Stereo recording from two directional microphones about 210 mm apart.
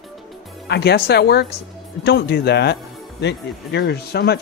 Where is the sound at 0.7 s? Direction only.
50° left (ahead or behind).